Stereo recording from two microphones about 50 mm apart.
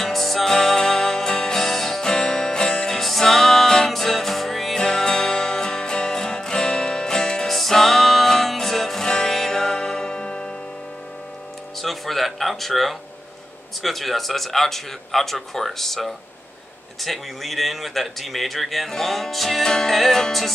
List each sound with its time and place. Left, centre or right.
0.0 s music: centre
2.9 s music: centre
4.7 s music: centre
11.8 s music: centre
13.8 s speech: centre